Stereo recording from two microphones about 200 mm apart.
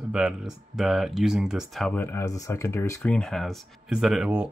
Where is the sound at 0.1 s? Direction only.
5° right (ahead or behind).